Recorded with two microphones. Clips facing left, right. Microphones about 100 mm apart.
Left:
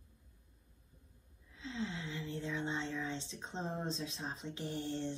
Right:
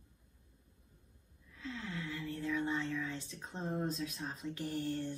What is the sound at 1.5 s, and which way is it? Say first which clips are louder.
Speech: left 2 dB; 25° left (ahead or behind).